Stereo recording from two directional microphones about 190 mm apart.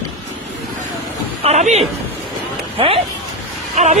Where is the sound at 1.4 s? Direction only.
35° right (ahead or behind).